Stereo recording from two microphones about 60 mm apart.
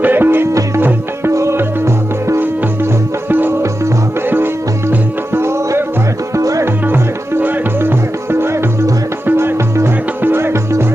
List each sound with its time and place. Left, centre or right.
0.0 s music: right
1.3 s music: right
3.2 s music: right
4.9 s music: right
6.3 s music: right
6.8 s music: right